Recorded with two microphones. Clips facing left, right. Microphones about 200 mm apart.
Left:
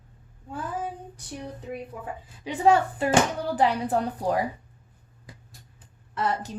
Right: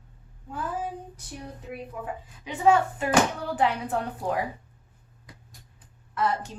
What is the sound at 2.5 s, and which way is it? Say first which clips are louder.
A woman's voice: left 1 dB; 35° left (ahead or behind).